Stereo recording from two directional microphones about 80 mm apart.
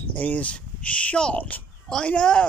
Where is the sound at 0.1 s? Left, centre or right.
Left.